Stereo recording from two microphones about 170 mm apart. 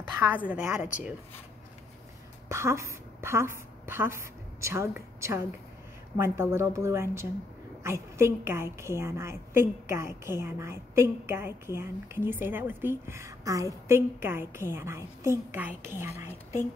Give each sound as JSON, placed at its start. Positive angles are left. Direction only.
{"t": 0.5, "sound": "a woman's voice", "side_deg": -10}
{"t": 0.7, "sound": "speech", "side_deg": 50}
{"t": 2.5, "sound": "a woman's voice", "side_deg": -15}